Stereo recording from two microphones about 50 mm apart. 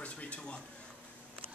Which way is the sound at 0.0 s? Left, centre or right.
Left.